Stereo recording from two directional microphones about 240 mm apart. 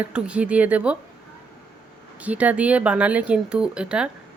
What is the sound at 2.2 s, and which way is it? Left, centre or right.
Speech, centre.